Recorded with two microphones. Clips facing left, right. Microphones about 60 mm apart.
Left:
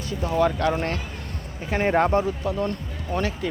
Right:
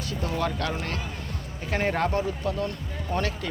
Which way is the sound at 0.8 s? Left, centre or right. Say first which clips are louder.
Left 5 dB; left.